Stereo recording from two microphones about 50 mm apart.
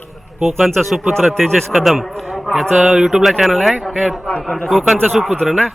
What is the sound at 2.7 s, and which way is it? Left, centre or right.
Speech, right.